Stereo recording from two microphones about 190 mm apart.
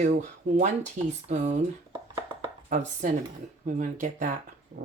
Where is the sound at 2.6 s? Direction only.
40° right (ahead or behind).